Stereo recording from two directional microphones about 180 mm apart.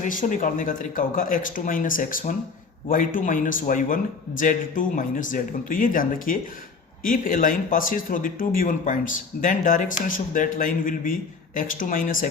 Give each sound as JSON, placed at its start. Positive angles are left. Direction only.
{"t": 0.0, "sound": "speech", "side_deg": 45}